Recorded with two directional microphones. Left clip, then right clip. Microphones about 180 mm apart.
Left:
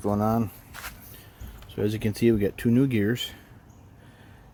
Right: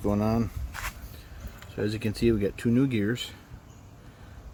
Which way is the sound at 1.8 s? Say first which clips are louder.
Left 3 dB; 40° left (ahead or behind).